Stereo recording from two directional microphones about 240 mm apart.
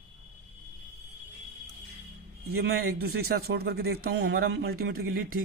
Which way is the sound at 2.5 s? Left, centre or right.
Right.